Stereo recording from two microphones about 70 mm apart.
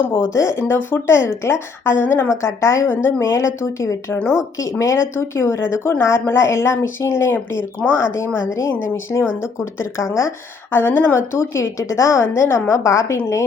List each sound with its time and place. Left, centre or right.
0.1 s speech: left
4.6 s speech: left
10.7 s speech: left